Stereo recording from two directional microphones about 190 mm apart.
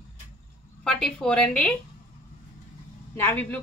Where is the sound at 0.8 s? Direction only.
5° left (ahead or behind).